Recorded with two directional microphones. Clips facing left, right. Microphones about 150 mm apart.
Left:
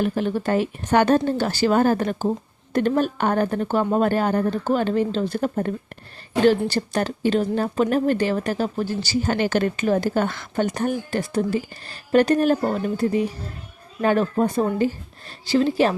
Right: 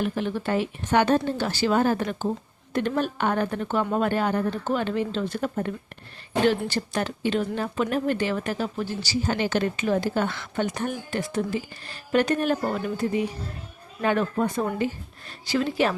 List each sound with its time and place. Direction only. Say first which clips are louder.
0.0 s speech: left 4 dB; 40° left (ahead or behind)